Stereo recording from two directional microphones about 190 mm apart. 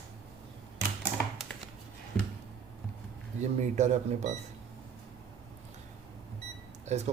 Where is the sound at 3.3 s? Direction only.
40° right (ahead or behind).